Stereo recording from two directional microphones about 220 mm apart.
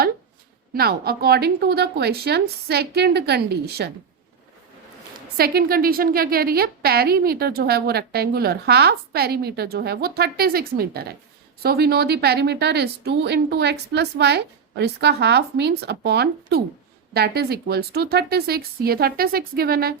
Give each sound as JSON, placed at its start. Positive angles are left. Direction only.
{"t": 0.7, "sound": "a woman's voice", "side_deg": -45}
{"t": 5.4, "sound": "a woman's voice", "side_deg": -45}